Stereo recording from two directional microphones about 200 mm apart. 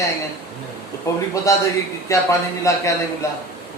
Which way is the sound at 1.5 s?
15° left (ahead or behind).